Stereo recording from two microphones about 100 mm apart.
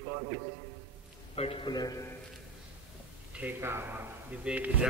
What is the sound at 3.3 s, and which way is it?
A man's voice, 20° right (ahead or behind).